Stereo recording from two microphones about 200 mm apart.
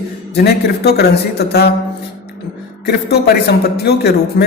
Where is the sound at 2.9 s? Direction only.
55° left (ahead or behind).